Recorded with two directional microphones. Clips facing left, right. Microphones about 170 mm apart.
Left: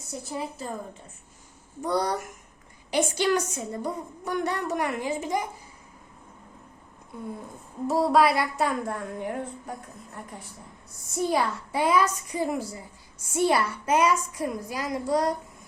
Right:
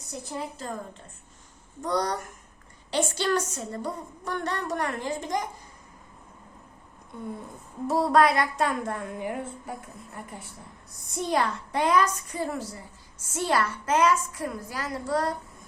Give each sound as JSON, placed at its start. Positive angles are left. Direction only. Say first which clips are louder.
{"t": 0.1, "sound": "a woman's voice", "louder": "left 1 dB", "side_deg": 5}
{"t": 1.8, "sound": "a woman's voice", "louder": "left 1 dB", "side_deg": 10}
{"t": 7.9, "sound": "a woman's voice", "louder": "even", "side_deg": 0}